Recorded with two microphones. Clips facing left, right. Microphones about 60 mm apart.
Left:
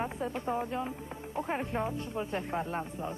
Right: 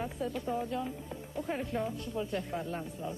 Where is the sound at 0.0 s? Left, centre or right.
Left.